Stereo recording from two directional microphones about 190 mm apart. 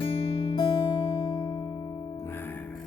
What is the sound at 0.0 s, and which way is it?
Music, 30° left (ahead or behind).